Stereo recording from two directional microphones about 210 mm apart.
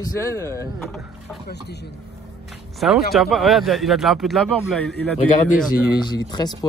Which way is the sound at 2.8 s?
Centre (ahead or behind).